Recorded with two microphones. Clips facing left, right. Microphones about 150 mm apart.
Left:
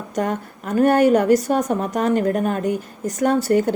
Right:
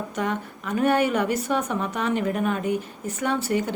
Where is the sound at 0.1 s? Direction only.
45° left (ahead or behind).